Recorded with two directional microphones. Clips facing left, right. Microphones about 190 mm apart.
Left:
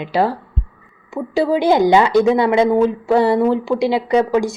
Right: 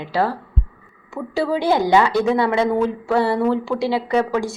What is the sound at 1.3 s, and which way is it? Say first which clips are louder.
A woman's voice: left 4 dB; 15° left (ahead or behind).